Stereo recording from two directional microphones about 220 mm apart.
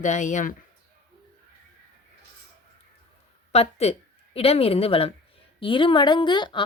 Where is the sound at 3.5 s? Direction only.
30° left (ahead or behind).